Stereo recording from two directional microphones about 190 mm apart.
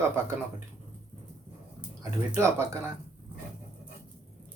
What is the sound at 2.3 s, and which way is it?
Speech, 15° right (ahead or behind).